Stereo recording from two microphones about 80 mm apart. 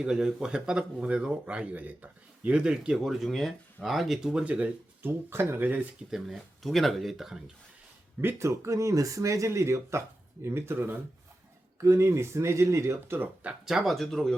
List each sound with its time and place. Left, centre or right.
0.0 s speech: centre
5.0 s speech: right
6.1 s speech: centre
8.2 s speech: right
13.1 s speech: centre
13.7 s speech: centre